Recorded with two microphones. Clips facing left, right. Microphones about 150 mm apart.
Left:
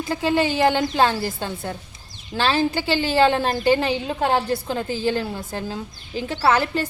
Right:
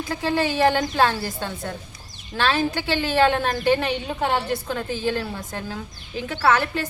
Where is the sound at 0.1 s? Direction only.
25° left (ahead or behind).